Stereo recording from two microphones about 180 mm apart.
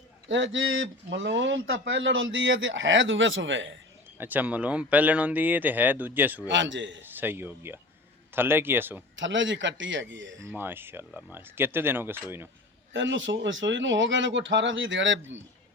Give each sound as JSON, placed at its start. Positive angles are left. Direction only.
{"t": 0.3, "sound": "speech", "side_deg": -90}
{"t": 4.2, "sound": "speech", "side_deg": -10}
{"t": 6.5, "sound": "speech", "side_deg": -90}
{"t": 7.0, "sound": "speech", "side_deg": -10}
{"t": 9.1, "sound": "speech", "side_deg": -90}
{"t": 10.5, "sound": "speech", "side_deg": -10}
{"t": 12.9, "sound": "speech", "side_deg": -90}